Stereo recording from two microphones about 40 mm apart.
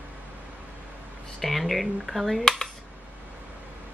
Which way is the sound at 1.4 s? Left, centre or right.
Centre.